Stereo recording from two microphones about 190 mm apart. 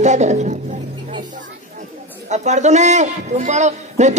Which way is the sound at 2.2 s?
40° right (ahead or behind).